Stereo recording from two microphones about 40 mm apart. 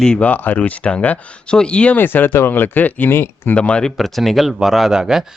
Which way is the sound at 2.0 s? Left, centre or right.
Left.